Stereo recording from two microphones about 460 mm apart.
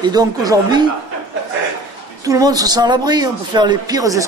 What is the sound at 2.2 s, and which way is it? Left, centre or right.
A man's voice, centre.